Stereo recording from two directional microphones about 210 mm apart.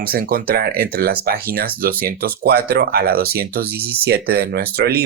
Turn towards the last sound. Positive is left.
turn(degrees=-50)  # may be behind; listen again after turning